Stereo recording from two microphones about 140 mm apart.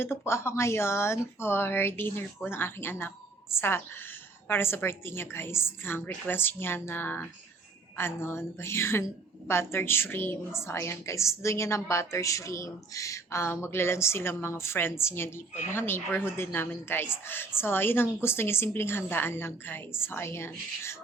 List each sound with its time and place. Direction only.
0.0 s a woman's voice: 20° left (ahead or behind)